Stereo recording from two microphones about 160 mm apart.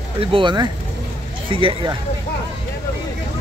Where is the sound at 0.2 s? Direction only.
30° right (ahead or behind).